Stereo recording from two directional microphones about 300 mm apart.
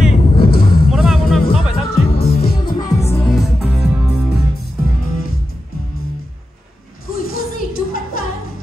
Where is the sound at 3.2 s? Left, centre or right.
Centre.